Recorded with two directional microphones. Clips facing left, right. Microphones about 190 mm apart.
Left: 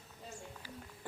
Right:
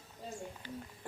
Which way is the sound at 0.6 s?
5° left (ahead or behind).